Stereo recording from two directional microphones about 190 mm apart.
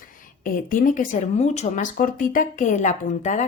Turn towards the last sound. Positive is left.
turn(degrees=40)  # may be behind; listen again after turning